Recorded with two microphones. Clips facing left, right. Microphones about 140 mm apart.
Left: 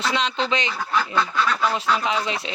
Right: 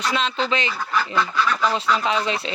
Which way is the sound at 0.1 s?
20° left (ahead or behind).